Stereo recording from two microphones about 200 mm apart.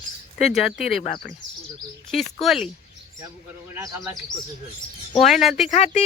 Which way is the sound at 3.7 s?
10° right (ahead or behind).